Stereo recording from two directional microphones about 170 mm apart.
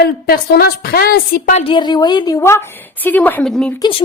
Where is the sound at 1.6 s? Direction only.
25° left (ahead or behind); by 3.5 s 10° left (ahead or behind).